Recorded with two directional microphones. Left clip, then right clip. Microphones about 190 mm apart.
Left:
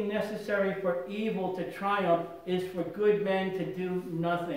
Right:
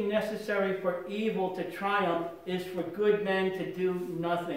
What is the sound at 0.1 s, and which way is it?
Speech, centre (ahead or behind).